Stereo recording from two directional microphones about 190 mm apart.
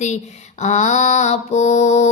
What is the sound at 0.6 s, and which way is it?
Mantra, 40° left (ahead or behind).